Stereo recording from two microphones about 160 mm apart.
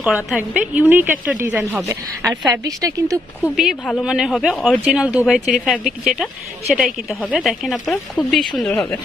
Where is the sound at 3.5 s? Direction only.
Centre (ahead or behind).